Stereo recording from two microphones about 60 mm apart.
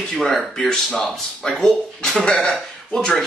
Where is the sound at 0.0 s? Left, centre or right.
Centre.